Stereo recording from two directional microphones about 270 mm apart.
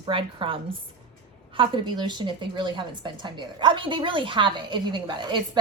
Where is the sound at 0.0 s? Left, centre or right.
Centre.